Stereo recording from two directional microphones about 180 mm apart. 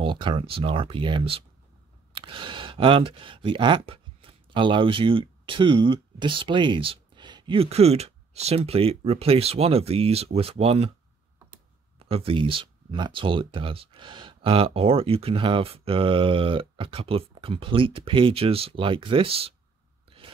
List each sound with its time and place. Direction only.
0.0 s speech: 25° right (ahead or behind)
12.0 s speech: 30° right (ahead or behind)